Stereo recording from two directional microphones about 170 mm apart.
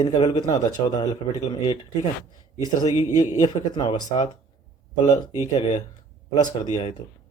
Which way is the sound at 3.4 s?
25° left (ahead or behind).